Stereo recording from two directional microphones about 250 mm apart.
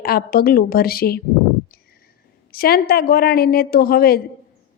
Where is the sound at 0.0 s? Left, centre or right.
Left.